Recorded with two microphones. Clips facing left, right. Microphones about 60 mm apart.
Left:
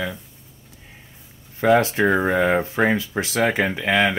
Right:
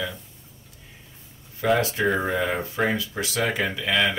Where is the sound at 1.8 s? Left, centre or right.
Left.